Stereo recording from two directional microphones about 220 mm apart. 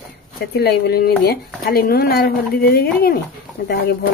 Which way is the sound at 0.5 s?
45° left (ahead or behind).